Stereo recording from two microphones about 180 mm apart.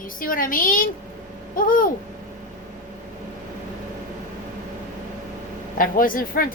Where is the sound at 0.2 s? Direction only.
50° left (ahead or behind).